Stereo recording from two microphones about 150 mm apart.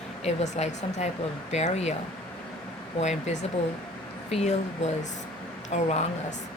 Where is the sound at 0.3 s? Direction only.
50° left (ahead or behind).